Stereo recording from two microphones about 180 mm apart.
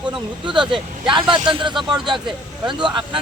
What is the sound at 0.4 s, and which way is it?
Speech, 25° right (ahead or behind).